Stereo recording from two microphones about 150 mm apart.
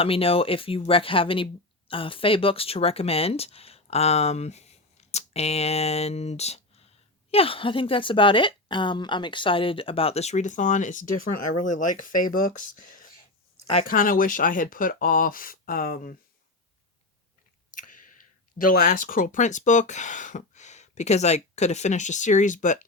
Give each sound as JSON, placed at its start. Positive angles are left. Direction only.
{"t": 0.0, "sound": "speech", "side_deg": 40}
{"t": 17.7, "sound": "chewing", "side_deg": 60}
{"t": 18.5, "sound": "speech", "side_deg": 65}